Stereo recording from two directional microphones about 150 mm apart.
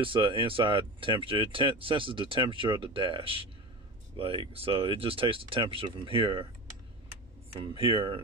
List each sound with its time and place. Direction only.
0.0 s speech: 35° right (ahead or behind)
7.6 s speech: 35° right (ahead or behind)